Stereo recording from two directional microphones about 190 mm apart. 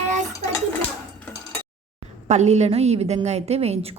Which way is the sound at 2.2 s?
35° right (ahead or behind).